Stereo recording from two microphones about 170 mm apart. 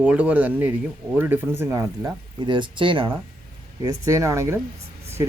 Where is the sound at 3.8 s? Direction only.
20° right (ahead or behind).